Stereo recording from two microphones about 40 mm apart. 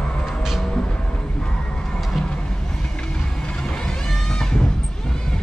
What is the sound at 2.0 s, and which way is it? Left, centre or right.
Music, centre.